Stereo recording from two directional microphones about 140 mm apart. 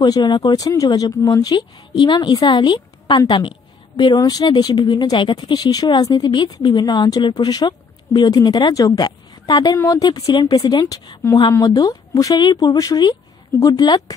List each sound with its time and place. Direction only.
0.0 s speech: 30° left (ahead or behind)